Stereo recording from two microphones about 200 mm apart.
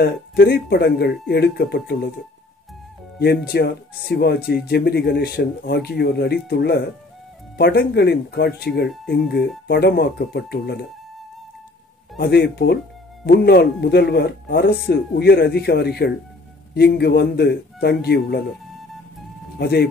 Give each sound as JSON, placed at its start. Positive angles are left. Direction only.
{"t": 0.0, "sound": "speech", "side_deg": 55}
{"t": 3.2, "sound": "speech", "side_deg": 55}
{"t": 12.2, "sound": "speech", "side_deg": 55}
{"t": 19.6, "sound": "speech", "side_deg": 55}